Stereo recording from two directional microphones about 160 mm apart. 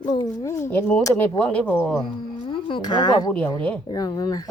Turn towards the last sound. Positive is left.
turn(degrees=25)  # may be behind; listen again after turning